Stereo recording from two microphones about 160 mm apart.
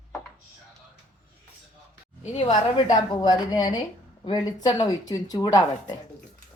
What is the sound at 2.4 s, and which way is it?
Speech, 30° left (ahead or behind).